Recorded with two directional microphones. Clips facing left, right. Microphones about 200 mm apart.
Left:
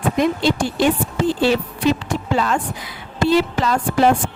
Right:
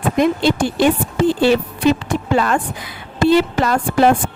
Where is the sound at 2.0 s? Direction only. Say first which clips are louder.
Right 3 dB; 55° right (ahead or behind).